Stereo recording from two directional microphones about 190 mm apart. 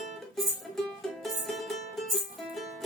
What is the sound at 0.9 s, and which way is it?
Music, centre (ahead or behind).